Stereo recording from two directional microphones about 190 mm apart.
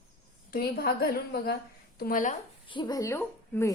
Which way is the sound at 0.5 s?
55° left (ahead or behind).